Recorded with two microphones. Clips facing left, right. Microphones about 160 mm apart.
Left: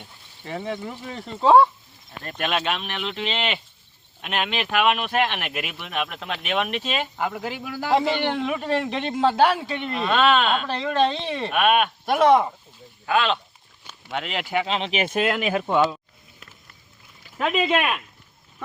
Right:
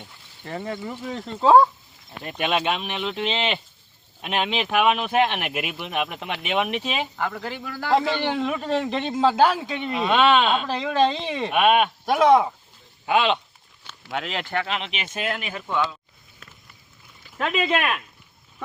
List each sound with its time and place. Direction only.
0.4 s a man's voice: centre (ahead or behind)
2.2 s speech: 10° right (ahead or behind)
3.1 s a man's voice: centre (ahead or behind)
4.2 s speech: 15° right (ahead or behind)
7.2 s a man's voice: 15° left (ahead or behind)
9.7 s speech: 10° right (ahead or behind)
12.0 s a man's voice: centre (ahead or behind)
13.1 s speech: 15° right (ahead or behind)
14.1 s a man's voice: centre (ahead or behind)
14.7 s speech: 35° left (ahead or behind)
15.1 s speech: 90° left
15.6 s speech: 45° left (ahead or behind)
17.3 s a man's voice: 5° left (ahead or behind)